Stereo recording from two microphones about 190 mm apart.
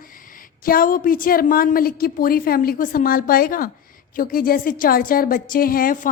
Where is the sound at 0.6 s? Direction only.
50° left (ahead or behind).